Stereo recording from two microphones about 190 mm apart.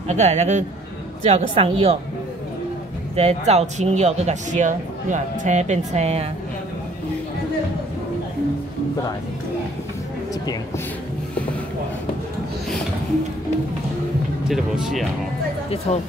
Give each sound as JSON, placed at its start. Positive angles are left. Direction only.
{"t": 0.1, "sound": "speech", "side_deg": -35}
{"t": 3.2, "sound": "speech", "side_deg": -35}
{"t": 14.5, "sound": "speech", "side_deg": 0}